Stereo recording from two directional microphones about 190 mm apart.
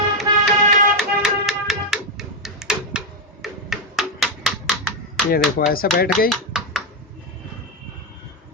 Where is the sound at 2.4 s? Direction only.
Centre (ahead or behind).